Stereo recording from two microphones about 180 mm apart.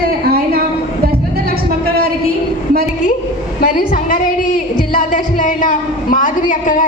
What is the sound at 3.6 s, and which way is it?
A woman's voice, 50° left (ahead or behind).